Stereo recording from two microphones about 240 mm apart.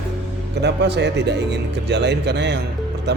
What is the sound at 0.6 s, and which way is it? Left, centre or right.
Speech, right.